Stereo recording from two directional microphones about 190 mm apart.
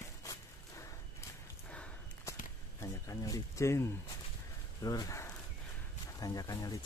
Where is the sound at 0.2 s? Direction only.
15° left (ahead or behind).